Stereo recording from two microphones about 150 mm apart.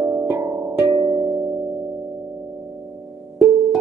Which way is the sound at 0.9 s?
35° right (ahead or behind).